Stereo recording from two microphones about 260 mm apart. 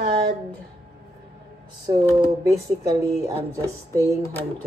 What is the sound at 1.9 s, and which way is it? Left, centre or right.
Speech, centre.